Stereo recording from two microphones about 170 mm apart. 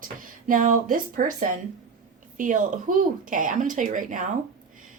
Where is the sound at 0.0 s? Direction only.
55° right (ahead or behind).